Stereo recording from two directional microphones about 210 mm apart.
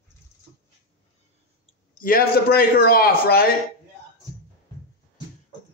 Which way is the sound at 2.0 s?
45° left (ahead or behind).